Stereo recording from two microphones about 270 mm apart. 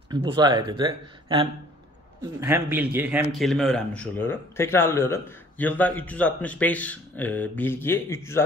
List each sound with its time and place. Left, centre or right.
0.1 s speech: centre